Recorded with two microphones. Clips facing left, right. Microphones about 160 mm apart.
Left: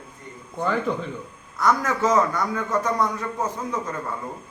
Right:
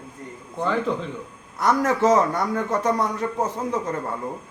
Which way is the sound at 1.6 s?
30° right (ahead or behind).